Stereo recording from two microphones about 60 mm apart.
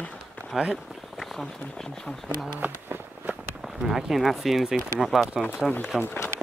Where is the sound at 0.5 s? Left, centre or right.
Centre.